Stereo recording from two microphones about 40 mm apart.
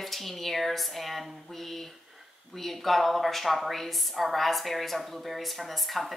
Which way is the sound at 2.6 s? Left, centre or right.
Centre.